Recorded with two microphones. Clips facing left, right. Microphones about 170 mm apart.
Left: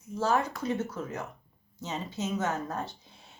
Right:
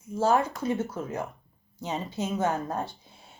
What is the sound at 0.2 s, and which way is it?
A woman's voice, 30° right (ahead or behind).